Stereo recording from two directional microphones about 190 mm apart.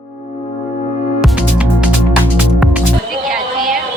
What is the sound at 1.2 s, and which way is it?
Music, 5° right (ahead or behind).